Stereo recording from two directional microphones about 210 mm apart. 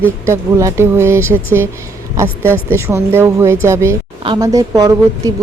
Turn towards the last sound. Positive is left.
turn(degrees=-15)  # may be behind; listen again after turning